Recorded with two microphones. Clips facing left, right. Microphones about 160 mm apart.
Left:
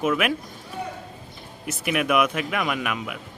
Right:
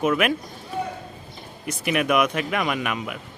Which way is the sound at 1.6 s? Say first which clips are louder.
Right 1 dB; 5° left (ahead or behind).